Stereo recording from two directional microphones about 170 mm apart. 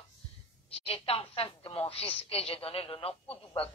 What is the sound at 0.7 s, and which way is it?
A woman's voice, 35° left (ahead or behind).